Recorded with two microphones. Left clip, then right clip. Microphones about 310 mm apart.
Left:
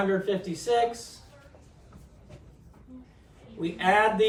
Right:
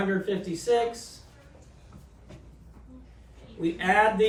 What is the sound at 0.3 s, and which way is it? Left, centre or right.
Speech, centre.